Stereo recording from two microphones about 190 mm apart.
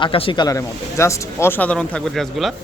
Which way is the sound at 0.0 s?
30° left (ahead or behind).